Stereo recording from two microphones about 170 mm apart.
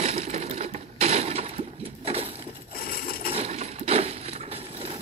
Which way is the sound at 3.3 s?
40° right (ahead or behind).